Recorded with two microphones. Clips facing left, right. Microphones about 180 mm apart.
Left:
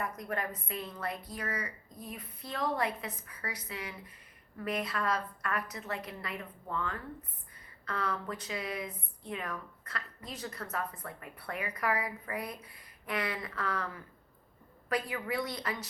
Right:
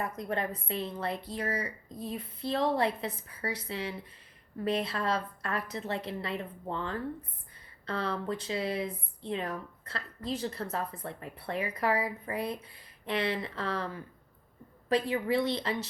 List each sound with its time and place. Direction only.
0.0 s speech: 25° right (ahead or behind)